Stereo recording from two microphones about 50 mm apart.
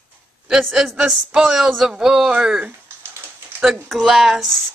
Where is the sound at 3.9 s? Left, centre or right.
Centre.